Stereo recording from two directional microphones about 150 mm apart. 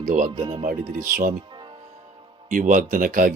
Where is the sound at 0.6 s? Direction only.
65° right (ahead or behind).